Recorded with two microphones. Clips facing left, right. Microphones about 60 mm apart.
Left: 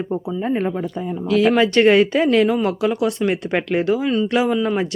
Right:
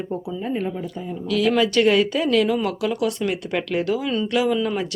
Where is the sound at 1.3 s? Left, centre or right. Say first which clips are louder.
Left 4 dB; left.